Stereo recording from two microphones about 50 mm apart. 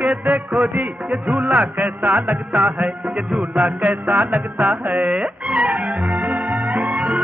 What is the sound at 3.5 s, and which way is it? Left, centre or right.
Music, right.